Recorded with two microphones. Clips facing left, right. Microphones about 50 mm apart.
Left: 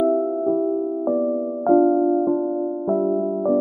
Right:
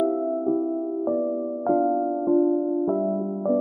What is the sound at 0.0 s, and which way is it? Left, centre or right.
Music, centre.